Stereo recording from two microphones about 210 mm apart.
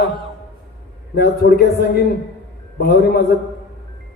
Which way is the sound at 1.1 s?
50° left (ahead or behind).